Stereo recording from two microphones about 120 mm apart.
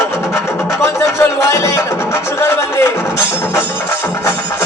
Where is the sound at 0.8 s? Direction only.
25° left (ahead or behind).